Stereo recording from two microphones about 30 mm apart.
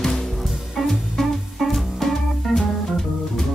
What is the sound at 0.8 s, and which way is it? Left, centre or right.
Music, centre.